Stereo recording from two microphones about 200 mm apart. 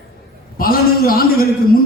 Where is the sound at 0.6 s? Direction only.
45° left (ahead or behind).